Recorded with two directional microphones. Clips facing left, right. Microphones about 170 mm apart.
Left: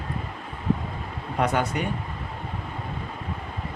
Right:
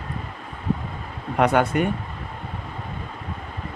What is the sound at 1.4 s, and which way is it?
Speech, 60° right (ahead or behind).